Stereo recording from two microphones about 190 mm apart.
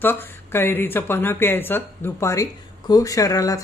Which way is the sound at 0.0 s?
10° left (ahead or behind).